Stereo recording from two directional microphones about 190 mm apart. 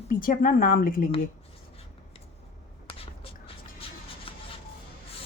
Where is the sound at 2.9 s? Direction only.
30° left (ahead or behind).